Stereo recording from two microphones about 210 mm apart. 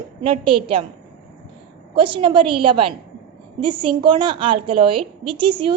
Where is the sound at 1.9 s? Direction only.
25° right (ahead or behind).